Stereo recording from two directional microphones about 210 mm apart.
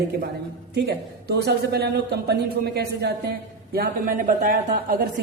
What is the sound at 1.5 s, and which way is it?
A man's voice, 50° right (ahead or behind).